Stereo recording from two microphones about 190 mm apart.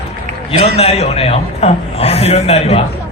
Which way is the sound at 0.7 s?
30° left (ahead or behind).